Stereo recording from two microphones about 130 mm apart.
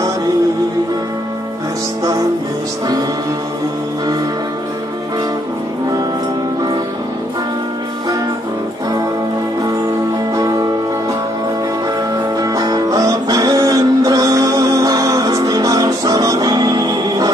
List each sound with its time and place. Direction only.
10.3 s music: 30° right (ahead or behind)
12.4 s music: 30° right (ahead or behind)